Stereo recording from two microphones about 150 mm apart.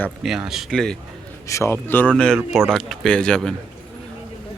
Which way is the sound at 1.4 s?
20° left (ahead or behind).